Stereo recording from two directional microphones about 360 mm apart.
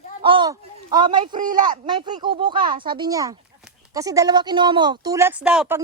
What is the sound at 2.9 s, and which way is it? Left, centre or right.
Speech, centre.